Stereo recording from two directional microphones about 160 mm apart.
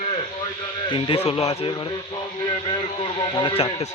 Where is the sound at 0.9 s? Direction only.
35° left (ahead or behind).